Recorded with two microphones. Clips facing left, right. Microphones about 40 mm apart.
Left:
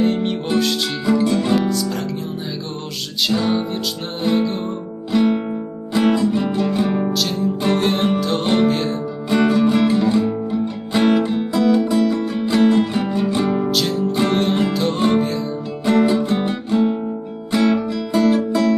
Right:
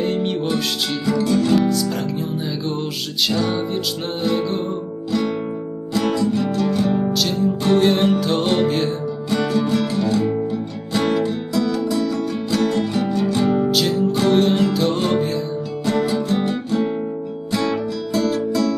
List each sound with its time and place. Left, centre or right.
0.0 s music: centre
1.0 s music: centre
1.7 s music: centre
3.3 s music: centre
5.1 s music: left
7.1 s music: centre
9.3 s music: left
13.7 s music: centre
15.8 s music: left